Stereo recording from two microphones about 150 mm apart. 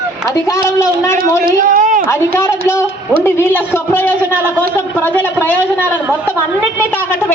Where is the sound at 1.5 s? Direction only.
60° right (ahead or behind).